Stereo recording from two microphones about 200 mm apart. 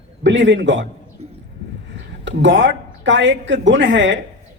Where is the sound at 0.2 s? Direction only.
65° right (ahead or behind).